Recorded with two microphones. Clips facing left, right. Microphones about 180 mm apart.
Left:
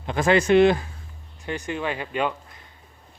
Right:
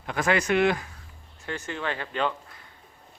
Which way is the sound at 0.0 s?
25° left (ahead or behind).